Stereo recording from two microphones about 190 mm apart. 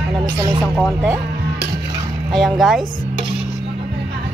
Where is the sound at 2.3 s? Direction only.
Centre (ahead or behind).